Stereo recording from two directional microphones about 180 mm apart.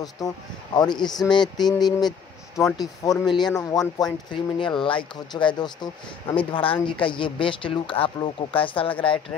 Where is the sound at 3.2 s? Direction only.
25° left (ahead or behind).